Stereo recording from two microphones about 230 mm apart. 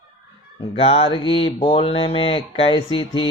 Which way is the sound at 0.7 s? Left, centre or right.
Left.